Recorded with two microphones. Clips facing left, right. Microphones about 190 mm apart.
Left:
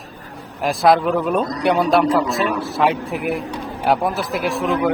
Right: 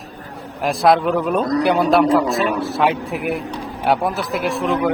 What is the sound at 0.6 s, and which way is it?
A man's voice, centre (ahead or behind).